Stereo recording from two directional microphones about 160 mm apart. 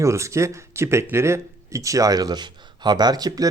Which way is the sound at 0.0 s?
20° right (ahead or behind).